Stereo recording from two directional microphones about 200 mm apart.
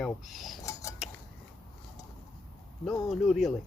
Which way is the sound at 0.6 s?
15° left (ahead or behind).